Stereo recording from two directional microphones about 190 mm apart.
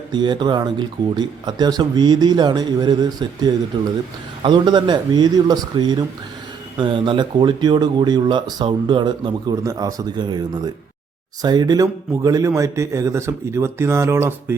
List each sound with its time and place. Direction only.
0.1 s speech: 25° right (ahead or behind)
11.4 s speech: 20° right (ahead or behind)